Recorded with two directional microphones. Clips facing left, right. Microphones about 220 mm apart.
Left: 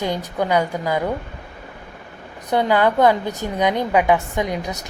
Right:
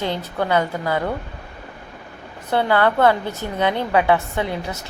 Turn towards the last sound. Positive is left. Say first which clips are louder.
# left 1 dB
turn(degrees=15)  # may be behind; listen again after turning